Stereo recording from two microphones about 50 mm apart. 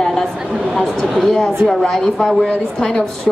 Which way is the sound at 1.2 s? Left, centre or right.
Centre.